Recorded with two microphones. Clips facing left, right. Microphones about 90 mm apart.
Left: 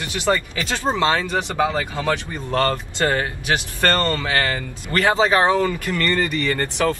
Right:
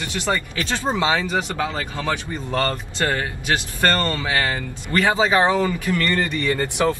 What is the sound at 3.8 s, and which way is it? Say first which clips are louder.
Speech: left 1 dB; 10° right (ahead or behind).